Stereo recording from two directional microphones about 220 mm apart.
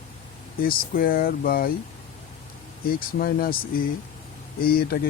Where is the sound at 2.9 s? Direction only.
40° left (ahead or behind).